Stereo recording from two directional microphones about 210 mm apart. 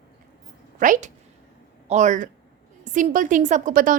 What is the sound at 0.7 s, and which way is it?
A woman's voice, 40° right (ahead or behind).